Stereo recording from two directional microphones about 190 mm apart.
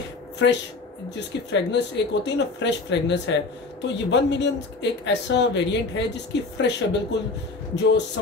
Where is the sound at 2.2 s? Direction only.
65° left (ahead or behind).